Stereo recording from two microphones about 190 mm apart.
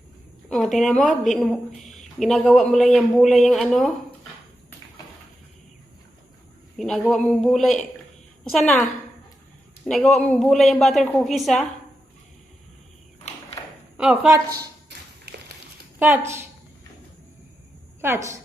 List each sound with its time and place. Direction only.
0.4 s speech: centre (ahead or behind)
6.7 s speech: centre (ahead or behind)
13.6 s a sound: 25° left (ahead or behind)
13.9 s speech: 5° right (ahead or behind)
14.3 s a woman's voice: 15° right (ahead or behind)
14.8 s tap: 60° right (ahead or behind)
16.0 s a woman's voice: 10° right (ahead or behind)
18.0 s a woman's voice: 15° right (ahead or behind)